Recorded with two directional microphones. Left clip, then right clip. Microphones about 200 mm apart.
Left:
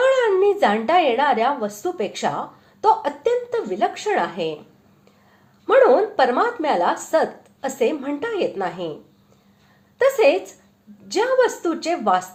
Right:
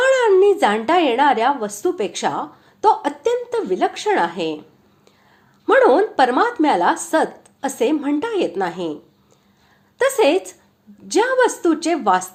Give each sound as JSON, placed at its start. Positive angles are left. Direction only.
{"t": 0.0, "sound": "speech", "side_deg": -30}
{"t": 5.6, "sound": "speech", "side_deg": -30}
{"t": 10.0, "sound": "speech", "side_deg": -35}